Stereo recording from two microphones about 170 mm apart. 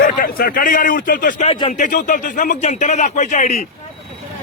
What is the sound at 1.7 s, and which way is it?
Speech, 50° left (ahead or behind).